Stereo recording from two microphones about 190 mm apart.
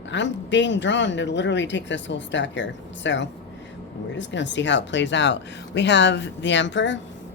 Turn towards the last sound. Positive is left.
turn(degrees=70)  # may be behind; listen again after turning